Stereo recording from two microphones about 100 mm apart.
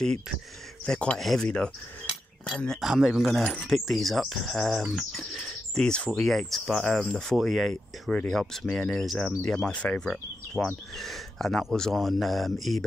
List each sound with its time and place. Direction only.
0.8 s speech: 10° left (ahead or behind)
2.9 s speech: 5° right (ahead or behind)